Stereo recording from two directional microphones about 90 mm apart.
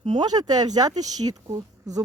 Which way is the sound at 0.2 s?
50° right (ahead or behind).